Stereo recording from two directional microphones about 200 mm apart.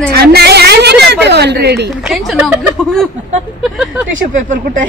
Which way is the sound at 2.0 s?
Centre (ahead or behind).